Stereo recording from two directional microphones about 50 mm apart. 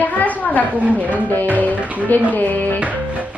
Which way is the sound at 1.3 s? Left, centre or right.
Left.